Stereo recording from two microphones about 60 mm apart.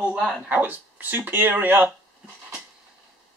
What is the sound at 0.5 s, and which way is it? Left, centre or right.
Speech, right.